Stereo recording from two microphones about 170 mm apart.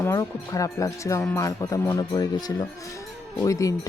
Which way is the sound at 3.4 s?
20° left (ahead or behind).